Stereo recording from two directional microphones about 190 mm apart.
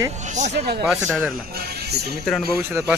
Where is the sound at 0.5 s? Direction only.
60° right (ahead or behind).